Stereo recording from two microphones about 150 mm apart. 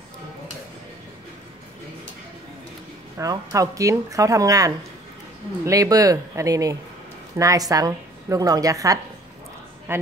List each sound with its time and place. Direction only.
3.2 s a woman's voice: 20° right (ahead or behind)